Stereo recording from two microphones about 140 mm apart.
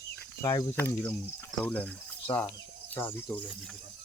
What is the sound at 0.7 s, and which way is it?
Speech, 15° left (ahead or behind).